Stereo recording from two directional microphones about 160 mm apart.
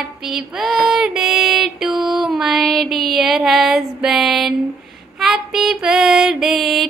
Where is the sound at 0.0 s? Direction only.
Centre (ahead or behind).